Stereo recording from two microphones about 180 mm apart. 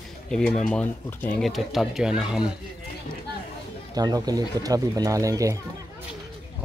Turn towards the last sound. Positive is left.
turn(degrees=-20)  # may be behind; listen again after turning